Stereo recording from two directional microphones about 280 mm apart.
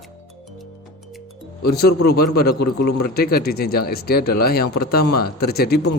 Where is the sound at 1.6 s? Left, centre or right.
Left.